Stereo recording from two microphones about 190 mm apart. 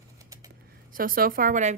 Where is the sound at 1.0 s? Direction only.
50° right (ahead or behind).